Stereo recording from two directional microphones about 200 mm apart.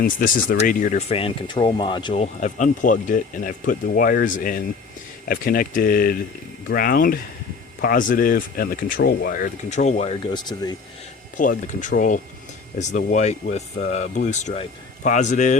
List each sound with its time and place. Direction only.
0.0 s speech: 45° left (ahead or behind); by 10.8 s 20° left (ahead or behind)
11.3 s speech: 40° left (ahead or behind)